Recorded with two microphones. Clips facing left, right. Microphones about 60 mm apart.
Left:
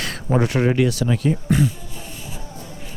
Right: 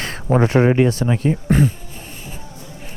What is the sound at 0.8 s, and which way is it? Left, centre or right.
Speech, right.